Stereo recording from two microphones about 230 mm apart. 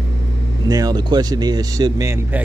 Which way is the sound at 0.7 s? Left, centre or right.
Centre.